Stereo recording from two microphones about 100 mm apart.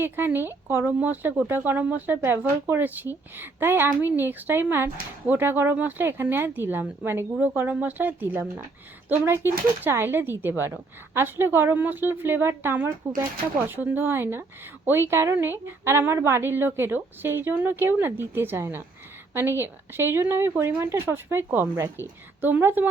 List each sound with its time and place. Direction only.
0.0 s speech: 20° right (ahead or behind)